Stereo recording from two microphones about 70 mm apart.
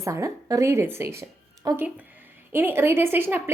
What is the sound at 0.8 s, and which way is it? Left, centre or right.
Speech, right.